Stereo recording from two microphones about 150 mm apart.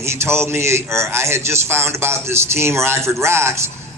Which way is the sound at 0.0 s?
15° right (ahead or behind).